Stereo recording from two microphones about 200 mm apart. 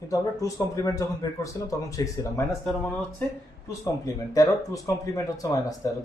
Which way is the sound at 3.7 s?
15° left (ahead or behind).